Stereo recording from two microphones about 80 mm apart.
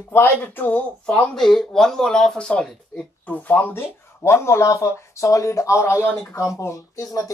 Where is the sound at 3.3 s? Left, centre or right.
Left.